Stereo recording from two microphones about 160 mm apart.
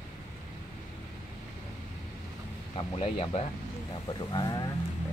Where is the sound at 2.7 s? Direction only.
35° left (ahead or behind).